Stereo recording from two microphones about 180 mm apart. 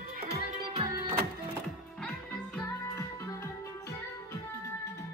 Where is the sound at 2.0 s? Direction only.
5° left (ahead or behind).